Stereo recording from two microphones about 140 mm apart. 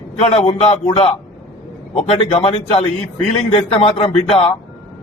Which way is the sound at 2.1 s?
45° left (ahead or behind).